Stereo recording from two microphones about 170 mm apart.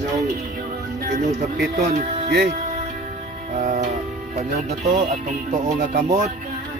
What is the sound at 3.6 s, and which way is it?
Music, 50° right (ahead or behind).